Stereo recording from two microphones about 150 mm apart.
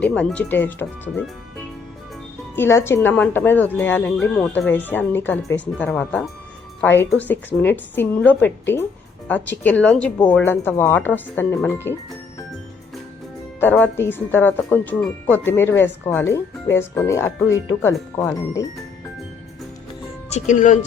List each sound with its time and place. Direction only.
0.0 s speech: 5° left (ahead or behind)
2.6 s speech: 15° left (ahead or behind)
13.6 s speech: 10° left (ahead or behind)
20.3 s speech: 55° left (ahead or behind)